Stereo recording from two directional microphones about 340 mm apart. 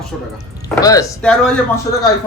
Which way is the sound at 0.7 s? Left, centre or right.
Centre.